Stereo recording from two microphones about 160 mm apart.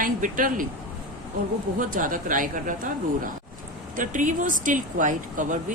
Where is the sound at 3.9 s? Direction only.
55° right (ahead or behind).